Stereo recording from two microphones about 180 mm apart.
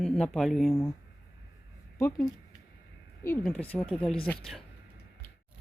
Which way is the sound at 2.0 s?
20° left (ahead or behind).